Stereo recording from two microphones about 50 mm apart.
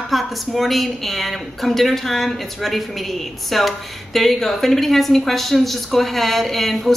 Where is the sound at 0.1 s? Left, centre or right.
Centre.